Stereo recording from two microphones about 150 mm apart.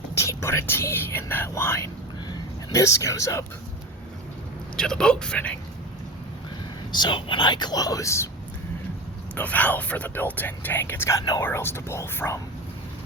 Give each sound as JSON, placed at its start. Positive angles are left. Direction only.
{"t": 0.1, "sound": "speech", "side_deg": 20}
{"t": 4.8, "sound": "speech", "side_deg": 5}
{"t": 6.9, "sound": "speech", "side_deg": 30}
{"t": 9.3, "sound": "speech", "side_deg": 10}